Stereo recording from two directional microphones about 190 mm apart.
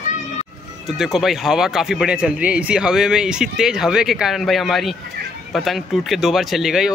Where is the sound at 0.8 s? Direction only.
Centre (ahead or behind).